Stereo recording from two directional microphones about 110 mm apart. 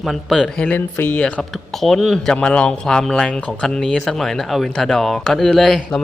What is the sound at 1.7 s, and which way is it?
A man's voice, centre (ahead or behind).